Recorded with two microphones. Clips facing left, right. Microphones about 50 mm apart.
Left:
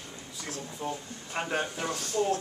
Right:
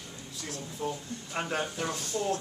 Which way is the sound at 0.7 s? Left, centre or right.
Centre.